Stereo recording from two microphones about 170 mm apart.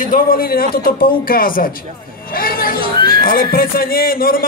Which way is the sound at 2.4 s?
60° left (ahead or behind).